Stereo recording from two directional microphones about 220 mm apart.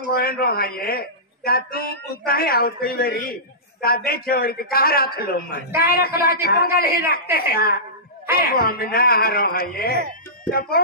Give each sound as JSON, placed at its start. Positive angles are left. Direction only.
{"t": 0.1, "sound": "a man's voice", "side_deg": 45}